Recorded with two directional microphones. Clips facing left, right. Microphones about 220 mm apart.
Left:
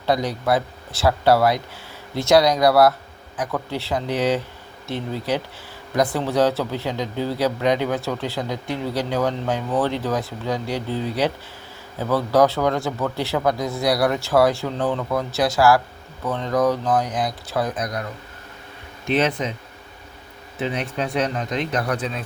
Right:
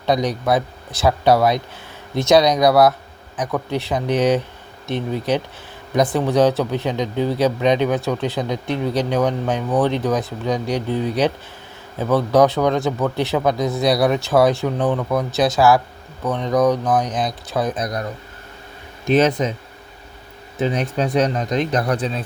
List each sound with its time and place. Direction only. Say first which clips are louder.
0.0 s a man's voice: right 2 dB; 20° right (ahead or behind)
17.7 s speech: right 3 dB; 35° right (ahead or behind)
19.0 s speech: right 5 dB; 45° right (ahead or behind)
20.6 s speech: right 5 dB; 40° right (ahead or behind)